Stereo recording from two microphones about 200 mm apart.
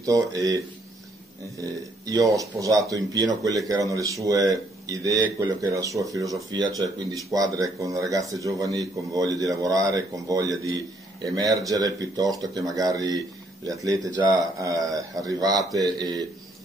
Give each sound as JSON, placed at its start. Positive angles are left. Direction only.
{"t": 0.0, "sound": "speech", "side_deg": -15}
{"t": 1.6, "sound": "speech", "side_deg": -15}